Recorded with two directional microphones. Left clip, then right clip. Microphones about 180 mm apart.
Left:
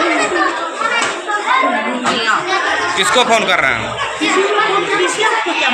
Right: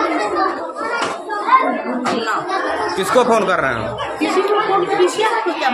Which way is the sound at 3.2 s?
50° right (ahead or behind).